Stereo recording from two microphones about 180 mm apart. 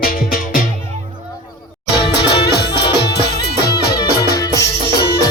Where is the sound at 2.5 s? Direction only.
65° left (ahead or behind).